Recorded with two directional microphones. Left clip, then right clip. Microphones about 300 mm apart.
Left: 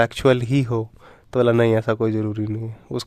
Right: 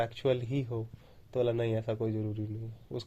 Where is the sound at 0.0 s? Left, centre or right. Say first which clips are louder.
Left 13 dB; left.